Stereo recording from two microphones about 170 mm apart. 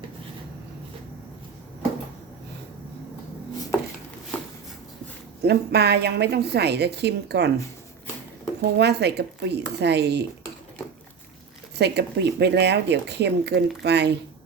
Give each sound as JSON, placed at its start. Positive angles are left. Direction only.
{"t": 5.4, "sound": "a woman's voice", "side_deg": -75}
{"t": 8.6, "sound": "a woman's voice", "side_deg": -80}
{"t": 11.8, "sound": "speech", "side_deg": -80}